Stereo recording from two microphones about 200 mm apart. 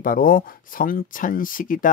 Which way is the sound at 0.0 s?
45° left (ahead or behind).